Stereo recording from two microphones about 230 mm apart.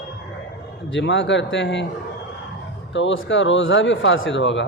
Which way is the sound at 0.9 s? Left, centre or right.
Left.